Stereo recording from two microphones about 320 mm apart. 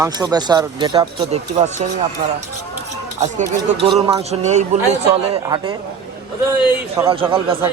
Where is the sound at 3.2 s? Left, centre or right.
Centre.